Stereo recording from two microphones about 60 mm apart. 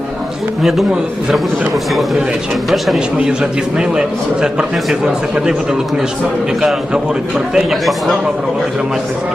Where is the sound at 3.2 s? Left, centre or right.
Centre.